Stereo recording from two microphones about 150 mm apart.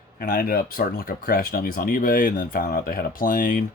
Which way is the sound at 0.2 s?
70° left (ahead or behind).